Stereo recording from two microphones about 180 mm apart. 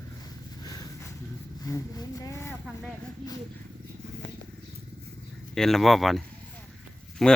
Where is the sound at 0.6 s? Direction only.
20° left (ahead or behind).